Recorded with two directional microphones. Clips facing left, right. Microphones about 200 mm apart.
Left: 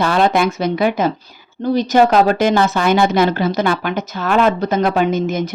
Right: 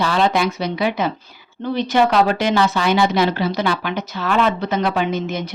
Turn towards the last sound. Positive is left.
turn(degrees=45)  # may be behind; listen again after turning